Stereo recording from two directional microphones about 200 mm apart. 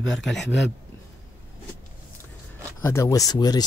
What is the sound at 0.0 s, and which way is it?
Speech, centre (ahead or behind).